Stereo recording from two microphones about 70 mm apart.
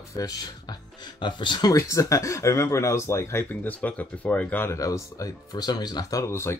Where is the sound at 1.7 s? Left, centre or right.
Left.